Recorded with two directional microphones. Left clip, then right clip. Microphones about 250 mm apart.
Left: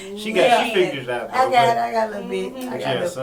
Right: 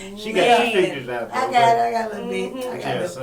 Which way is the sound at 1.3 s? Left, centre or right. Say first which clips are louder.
Even; centre.